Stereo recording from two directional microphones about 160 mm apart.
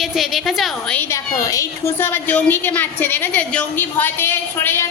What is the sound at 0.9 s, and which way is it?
A woman's voice, 20° left (ahead or behind).